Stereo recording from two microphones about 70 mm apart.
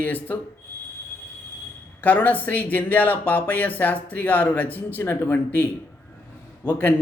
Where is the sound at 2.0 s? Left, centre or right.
Left.